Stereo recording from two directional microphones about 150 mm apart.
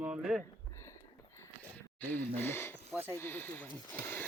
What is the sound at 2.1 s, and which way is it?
Speech, 10° left (ahead or behind).